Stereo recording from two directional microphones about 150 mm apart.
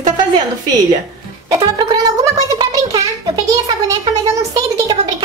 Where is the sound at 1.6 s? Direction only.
25° right (ahead or behind).